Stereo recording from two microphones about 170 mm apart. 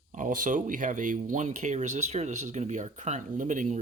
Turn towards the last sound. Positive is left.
turn(degrees=-45)  # may be behind; listen again after turning